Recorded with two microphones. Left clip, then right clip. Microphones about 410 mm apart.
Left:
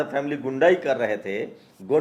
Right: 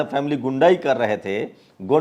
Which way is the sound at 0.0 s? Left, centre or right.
Right.